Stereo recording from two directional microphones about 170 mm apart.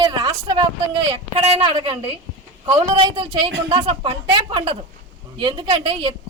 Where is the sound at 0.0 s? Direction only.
25° right (ahead or behind).